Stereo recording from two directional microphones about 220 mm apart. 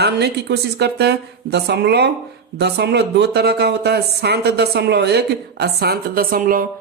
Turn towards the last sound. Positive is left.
turn(degrees=-40)  # may be behind; listen again after turning